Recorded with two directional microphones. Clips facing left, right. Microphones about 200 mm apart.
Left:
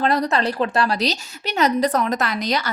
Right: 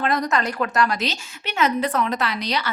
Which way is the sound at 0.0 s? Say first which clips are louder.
Left 3 dB; 35° left (ahead or behind).